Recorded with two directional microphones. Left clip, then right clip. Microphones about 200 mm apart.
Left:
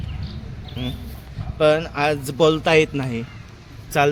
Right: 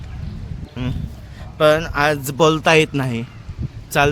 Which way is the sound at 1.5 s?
10° right (ahead or behind).